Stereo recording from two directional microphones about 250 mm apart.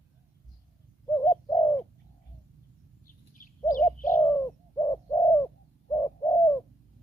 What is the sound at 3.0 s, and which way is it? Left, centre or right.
Bird, left.